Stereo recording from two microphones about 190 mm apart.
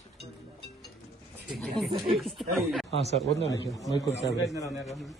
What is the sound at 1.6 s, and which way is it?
Speech, centre (ahead or behind).